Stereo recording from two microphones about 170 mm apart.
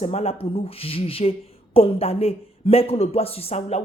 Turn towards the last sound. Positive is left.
turn(degrees=35)  # may be behind; listen again after turning